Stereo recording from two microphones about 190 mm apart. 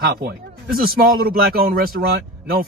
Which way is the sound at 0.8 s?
50° right (ahead or behind).